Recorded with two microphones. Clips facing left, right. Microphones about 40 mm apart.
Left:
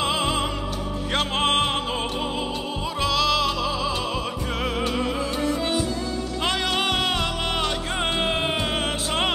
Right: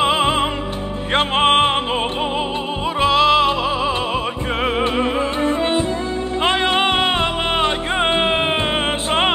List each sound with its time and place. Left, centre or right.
0.0 s music: right
3.0 s music: right